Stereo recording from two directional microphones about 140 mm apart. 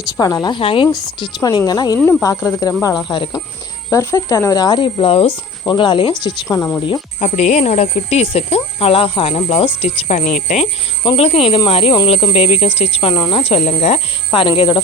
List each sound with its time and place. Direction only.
0.2 s speech: 30° left (ahead or behind)
0.9 s speech: 25° left (ahead or behind)
3.8 s speech: 20° left (ahead or behind)
6.6 s speech: 10° left (ahead or behind)
7.2 s speech: 55° left (ahead or behind)
11.0 s speech: 40° left (ahead or behind)
14.3 s speech: 40° left (ahead or behind)